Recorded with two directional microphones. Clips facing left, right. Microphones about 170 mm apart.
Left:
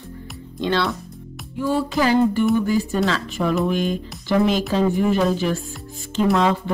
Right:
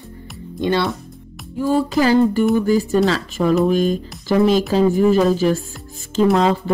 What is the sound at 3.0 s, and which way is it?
Speech, 35° right (ahead or behind).